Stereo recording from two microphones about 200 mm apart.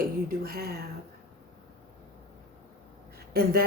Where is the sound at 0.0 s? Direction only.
50° right (ahead or behind).